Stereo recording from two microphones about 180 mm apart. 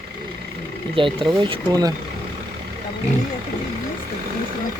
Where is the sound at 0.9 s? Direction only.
30° right (ahead or behind).